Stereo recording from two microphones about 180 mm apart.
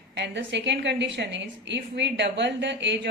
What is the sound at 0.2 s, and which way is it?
A woman's voice, 75° right (ahead or behind).